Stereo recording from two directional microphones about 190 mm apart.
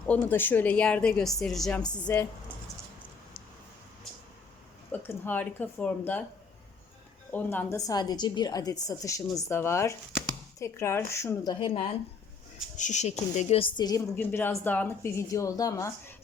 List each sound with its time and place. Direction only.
0.0 s speech: 10° left (ahead or behind)
4.9 s speech: 10° left (ahead or behind)
7.3 s speech: 10° left (ahead or behind)
11.6 s speech: 30° left (ahead or behind); by 16.1 s 15° left (ahead or behind)